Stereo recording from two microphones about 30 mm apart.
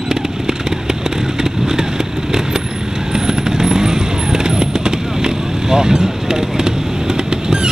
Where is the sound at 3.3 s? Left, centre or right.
Centre.